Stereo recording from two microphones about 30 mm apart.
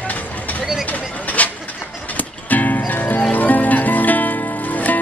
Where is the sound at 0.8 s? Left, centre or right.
Left.